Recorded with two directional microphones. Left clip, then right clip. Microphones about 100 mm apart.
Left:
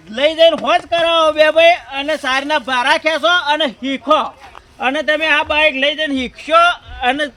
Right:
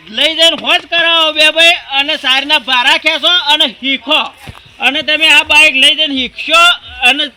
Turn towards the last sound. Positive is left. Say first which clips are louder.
# right 6 dB
turn(degrees=35)  # may be behind; listen again after turning